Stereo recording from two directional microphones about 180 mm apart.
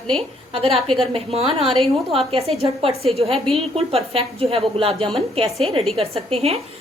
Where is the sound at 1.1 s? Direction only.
35° right (ahead or behind).